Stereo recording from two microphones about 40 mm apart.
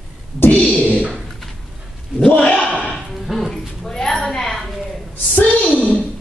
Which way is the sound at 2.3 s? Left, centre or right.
Left.